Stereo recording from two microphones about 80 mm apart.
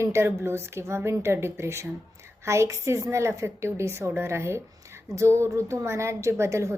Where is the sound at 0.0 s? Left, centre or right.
Right.